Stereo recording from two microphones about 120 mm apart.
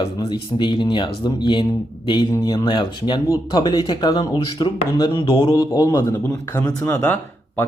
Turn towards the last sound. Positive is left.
turn(degrees=15)  # may be behind; listen again after turning